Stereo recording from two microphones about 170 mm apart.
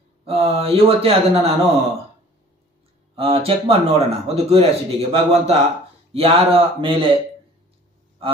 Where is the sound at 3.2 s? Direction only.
35° right (ahead or behind).